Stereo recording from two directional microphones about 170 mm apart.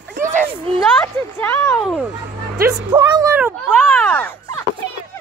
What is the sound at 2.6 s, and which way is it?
Speech, 25° right (ahead or behind).